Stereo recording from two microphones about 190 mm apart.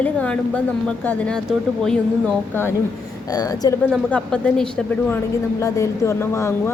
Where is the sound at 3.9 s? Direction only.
5° left (ahead or behind).